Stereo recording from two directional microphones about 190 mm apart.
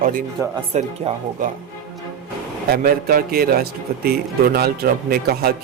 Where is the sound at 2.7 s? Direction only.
55° right (ahead or behind).